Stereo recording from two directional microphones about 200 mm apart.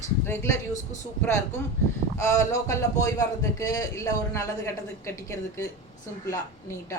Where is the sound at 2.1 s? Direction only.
15° left (ahead or behind).